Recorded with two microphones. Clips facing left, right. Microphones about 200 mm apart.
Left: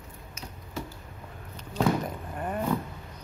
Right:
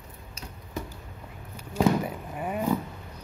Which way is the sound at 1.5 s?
10° right (ahead or behind).